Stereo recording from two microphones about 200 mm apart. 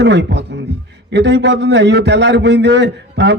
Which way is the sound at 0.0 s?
60° right (ahead or behind).